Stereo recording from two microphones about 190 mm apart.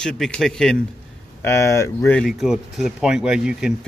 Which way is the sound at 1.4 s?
15° left (ahead or behind).